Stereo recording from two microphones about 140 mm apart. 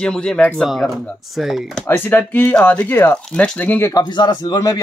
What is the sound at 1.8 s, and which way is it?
Speech, 15° left (ahead or behind).